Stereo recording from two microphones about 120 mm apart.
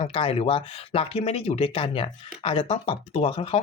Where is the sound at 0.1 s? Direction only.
50° left (ahead or behind).